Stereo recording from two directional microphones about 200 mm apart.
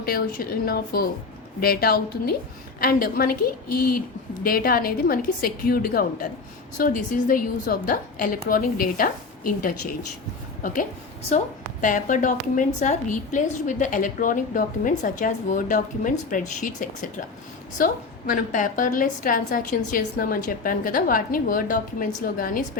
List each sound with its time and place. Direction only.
0.0 s a woman's voice: 45° left (ahead or behind)
11.8 s a woman's voice: 40° left (ahead or behind)